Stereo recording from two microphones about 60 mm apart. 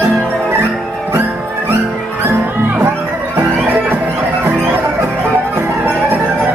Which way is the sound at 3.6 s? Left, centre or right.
Right.